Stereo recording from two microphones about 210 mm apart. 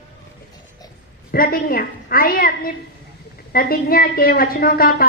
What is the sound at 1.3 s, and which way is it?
A woman's voice, 45° left (ahead or behind).